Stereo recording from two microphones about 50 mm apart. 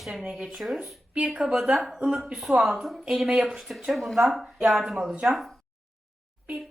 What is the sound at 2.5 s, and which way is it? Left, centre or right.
Speech, centre.